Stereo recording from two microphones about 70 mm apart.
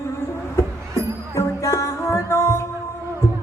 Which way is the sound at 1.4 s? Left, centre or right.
Left.